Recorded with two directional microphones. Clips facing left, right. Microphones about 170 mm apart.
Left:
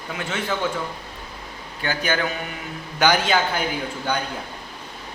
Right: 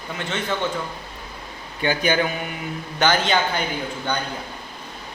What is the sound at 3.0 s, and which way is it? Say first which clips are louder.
Speech: left 1 dB; 10° left (ahead or behind).